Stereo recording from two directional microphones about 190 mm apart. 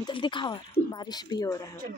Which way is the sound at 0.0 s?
25° left (ahead or behind).